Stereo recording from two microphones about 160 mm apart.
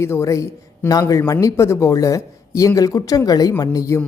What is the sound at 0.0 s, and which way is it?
A man's voice, 15° left (ahead or behind).